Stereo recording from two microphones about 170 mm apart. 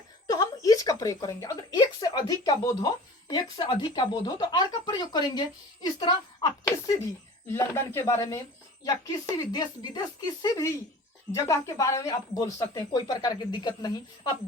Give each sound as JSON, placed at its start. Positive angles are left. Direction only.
{"t": 0.3, "sound": "speech", "side_deg": 20}